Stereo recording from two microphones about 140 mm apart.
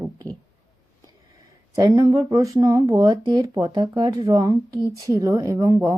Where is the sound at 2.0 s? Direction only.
25° right (ahead or behind).